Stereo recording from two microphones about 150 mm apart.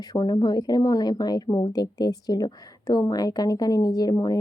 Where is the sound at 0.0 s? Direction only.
25° left (ahead or behind).